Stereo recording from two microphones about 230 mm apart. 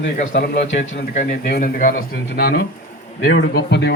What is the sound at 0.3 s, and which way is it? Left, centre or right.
Speech, left.